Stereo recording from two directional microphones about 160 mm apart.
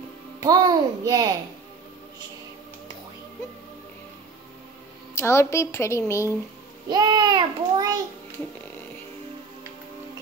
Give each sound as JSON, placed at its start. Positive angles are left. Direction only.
{"t": 0.4, "sound": "a child's voice", "side_deg": -25}
{"t": 5.1, "sound": "a woman's voice", "side_deg": 15}
{"t": 6.9, "sound": "a child's voice", "side_deg": -25}